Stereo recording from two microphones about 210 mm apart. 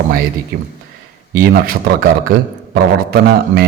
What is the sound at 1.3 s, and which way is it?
A man's voice, 45° right (ahead or behind).